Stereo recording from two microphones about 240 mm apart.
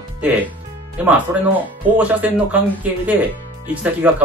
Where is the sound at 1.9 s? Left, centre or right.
Centre.